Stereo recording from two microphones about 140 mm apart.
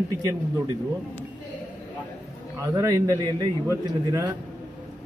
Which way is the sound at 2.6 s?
25° right (ahead or behind).